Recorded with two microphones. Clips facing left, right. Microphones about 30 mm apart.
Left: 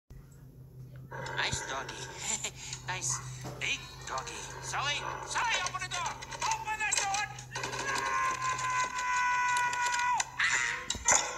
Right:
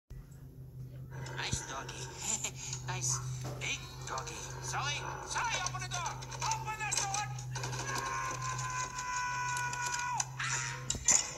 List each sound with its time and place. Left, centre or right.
1.1 s speech: left
2.4 s speech: left
3.6 s speech: left
5.2 s a sound: left